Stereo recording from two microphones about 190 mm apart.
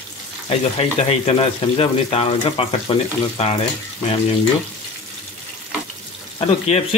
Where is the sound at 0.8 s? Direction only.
30° left (ahead or behind).